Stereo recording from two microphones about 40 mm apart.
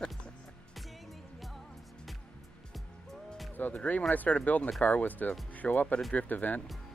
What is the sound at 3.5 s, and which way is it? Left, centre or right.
Speech, left.